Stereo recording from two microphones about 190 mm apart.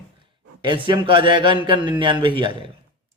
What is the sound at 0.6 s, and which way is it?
Speech, 25° right (ahead or behind).